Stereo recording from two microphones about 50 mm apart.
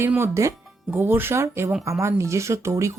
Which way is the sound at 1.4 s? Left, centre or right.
Right.